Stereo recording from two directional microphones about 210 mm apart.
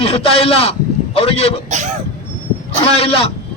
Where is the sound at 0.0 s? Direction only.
30° left (ahead or behind).